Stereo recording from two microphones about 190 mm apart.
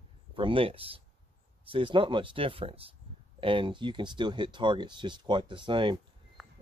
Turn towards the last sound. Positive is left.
turn(degrees=-25)  # may be behind; listen again after turning